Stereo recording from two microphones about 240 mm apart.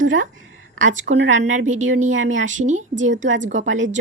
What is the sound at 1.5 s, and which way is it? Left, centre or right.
Speech, right.